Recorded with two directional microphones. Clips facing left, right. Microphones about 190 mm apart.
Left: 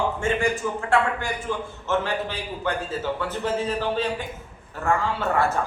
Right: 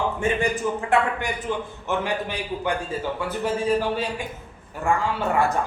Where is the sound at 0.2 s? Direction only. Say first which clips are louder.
Even; 15° right (ahead or behind).